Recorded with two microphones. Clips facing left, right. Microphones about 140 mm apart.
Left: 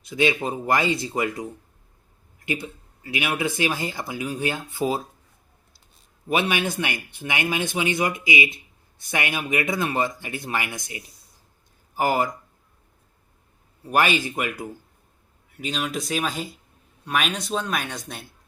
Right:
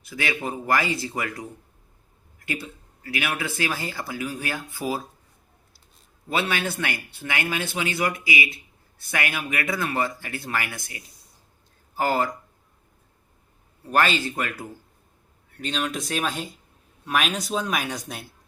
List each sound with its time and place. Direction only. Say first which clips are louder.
0.0 s speech: left 6 dB; 20° left (ahead or behind)
6.2 s speech: left 3 dB; 15° left (ahead or behind)
13.9 s speech: left 1 dB; 10° left (ahead or behind); by 18.3 s 5° right (ahead or behind)